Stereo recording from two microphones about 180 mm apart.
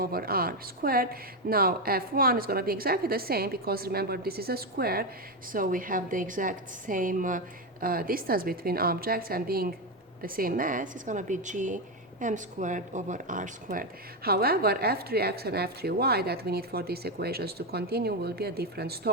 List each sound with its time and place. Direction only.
0.0 s a woman's voice: 55° right (ahead or behind)
14.3 s speech: 60° right (ahead or behind)